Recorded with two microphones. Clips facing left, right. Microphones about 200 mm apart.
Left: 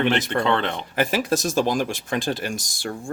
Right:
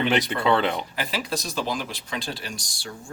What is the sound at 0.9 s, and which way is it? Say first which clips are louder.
Speech: left 7 dB; 45° left (ahead or behind).